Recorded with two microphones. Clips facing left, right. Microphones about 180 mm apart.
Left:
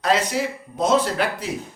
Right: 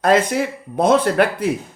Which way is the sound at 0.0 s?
50° right (ahead or behind).